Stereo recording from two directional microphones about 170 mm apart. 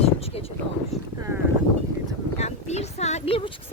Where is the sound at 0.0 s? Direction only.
35° left (ahead or behind).